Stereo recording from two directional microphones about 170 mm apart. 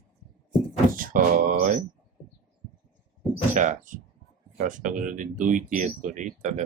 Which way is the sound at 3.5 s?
50° right (ahead or behind).